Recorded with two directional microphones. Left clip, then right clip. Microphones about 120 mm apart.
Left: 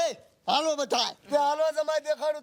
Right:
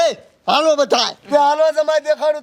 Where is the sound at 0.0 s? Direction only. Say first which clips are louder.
Right 12 dB; 25° right (ahead or behind).